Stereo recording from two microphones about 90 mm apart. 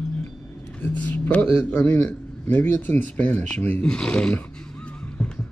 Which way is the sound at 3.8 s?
10° left (ahead or behind).